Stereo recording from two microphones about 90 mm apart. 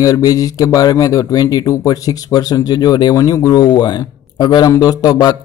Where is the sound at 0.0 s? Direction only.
40° left (ahead or behind).